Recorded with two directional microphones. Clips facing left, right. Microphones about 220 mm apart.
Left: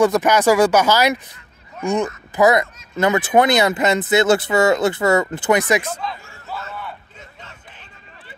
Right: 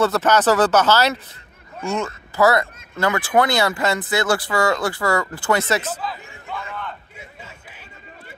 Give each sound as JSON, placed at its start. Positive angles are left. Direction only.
{"t": 0.0, "sound": "speech", "side_deg": 15}
{"t": 5.9, "sound": "speech", "side_deg": -5}
{"t": 6.7, "sound": "a sound", "side_deg": 10}